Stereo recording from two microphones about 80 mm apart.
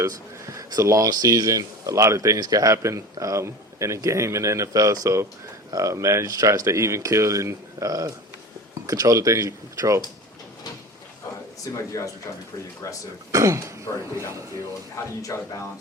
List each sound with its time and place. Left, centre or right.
0.0 s speech: right
2.7 s speech: right
11.6 s speech: left
13.3 s speech: right
14.9 s speech: left